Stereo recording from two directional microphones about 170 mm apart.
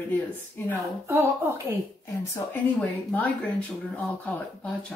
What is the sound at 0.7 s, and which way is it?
Speech, 10° right (ahead or behind).